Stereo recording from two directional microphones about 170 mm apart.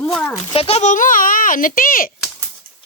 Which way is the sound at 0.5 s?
35° left (ahead or behind).